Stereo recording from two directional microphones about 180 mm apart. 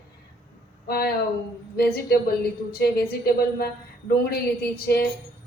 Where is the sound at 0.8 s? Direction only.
60° left (ahead or behind).